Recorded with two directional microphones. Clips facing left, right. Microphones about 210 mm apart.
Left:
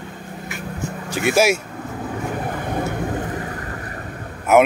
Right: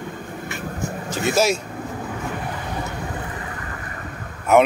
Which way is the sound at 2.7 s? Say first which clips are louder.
Left 6 dB; 45° left (ahead or behind).